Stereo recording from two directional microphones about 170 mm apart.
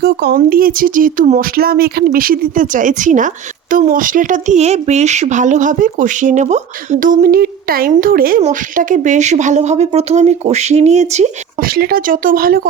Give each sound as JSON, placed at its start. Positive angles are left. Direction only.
{"t": 0.0, "sound": "speech", "side_deg": -70}
{"t": 8.4, "sound": "speech", "side_deg": -45}
{"t": 11.6, "sound": "speech", "side_deg": -60}